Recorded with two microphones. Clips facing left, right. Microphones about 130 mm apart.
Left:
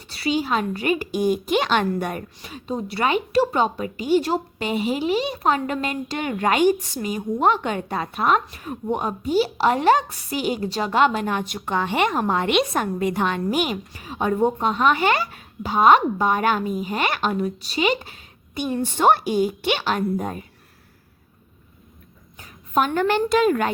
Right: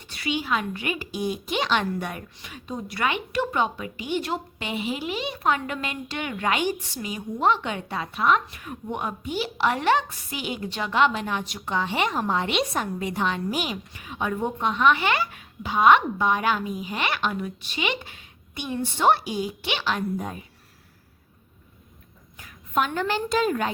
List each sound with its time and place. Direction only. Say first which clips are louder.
0.1 s a woman's voice: left 4 dB; 35° left (ahead or behind); by 13.7 s 55° left (ahead or behind)
13.9 s a woman's voice: left 5 dB; 35° left (ahead or behind)
22.4 s a sound: left 4 dB; 35° left (ahead or behind)
22.9 s a woman's voice: left 6 dB; 55° left (ahead or behind)